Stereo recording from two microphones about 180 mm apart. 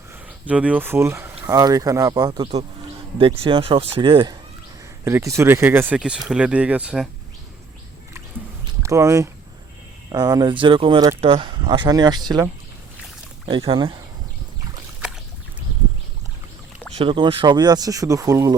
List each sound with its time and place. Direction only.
0.1 s speech: 10° right (ahead or behind); by 4.4 s 25° right (ahead or behind)
5.0 s speech: 15° right (ahead or behind)
8.8 s speech: 15° right (ahead or behind)
13.5 s speech: 30° right (ahead or behind)
17.0 s speech: 30° right (ahead or behind)